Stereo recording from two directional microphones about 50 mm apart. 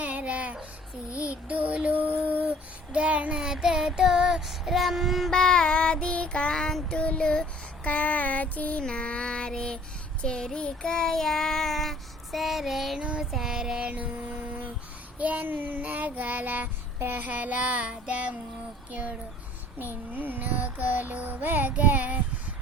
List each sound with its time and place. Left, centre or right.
0.0 s child singing: right
2.9 s child singing: right
3.3 s child singing: centre
5.3 s child singing: centre
6.9 s music: left
7.9 s a sound: left
8.8 s music: left
10.2 s child singing: centre
13.0 s child singing: right
13.3 s child singing: centre
13.7 s music: right
15.2 s child singing: right
18.9 s speech: right
19.8 s child singing: right